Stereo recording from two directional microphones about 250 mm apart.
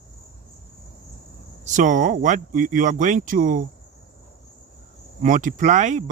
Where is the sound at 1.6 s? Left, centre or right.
Right.